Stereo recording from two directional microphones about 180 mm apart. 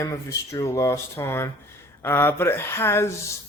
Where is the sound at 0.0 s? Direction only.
15° left (ahead or behind).